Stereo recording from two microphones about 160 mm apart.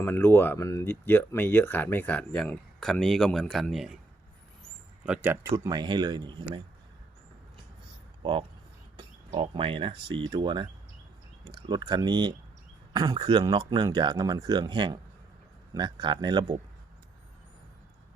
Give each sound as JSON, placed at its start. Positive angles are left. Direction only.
{"t": 0.0, "sound": "speech", "side_deg": 15}
{"t": 5.0, "sound": "speech", "side_deg": -10}
{"t": 8.2, "sound": "speech", "side_deg": -30}